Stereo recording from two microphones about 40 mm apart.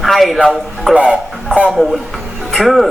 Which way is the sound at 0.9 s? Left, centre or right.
Right.